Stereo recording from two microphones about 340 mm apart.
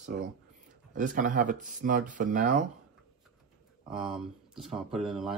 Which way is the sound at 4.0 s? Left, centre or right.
Centre.